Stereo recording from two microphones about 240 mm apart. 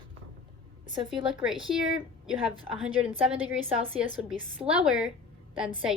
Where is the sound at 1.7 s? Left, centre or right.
Centre.